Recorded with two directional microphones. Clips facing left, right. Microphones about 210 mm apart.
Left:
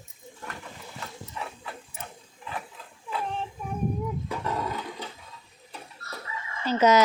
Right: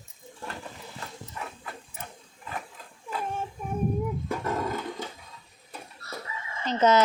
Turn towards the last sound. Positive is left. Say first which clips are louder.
# left 1 dB
turn(degrees=10)  # may be behind; listen again after turning